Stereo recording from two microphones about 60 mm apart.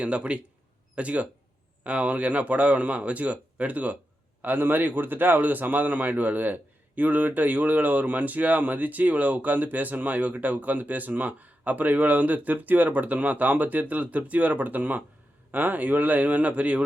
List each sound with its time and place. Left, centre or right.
0.0 s a man's voice: right